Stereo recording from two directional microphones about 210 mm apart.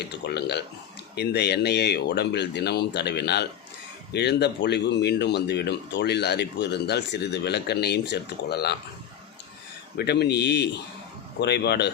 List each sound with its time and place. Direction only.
0.3 s speech: 50° left (ahead or behind)
10.0 s speech: 50° left (ahead or behind)